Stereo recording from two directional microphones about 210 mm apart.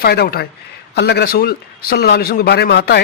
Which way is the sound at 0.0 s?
50° left (ahead or behind).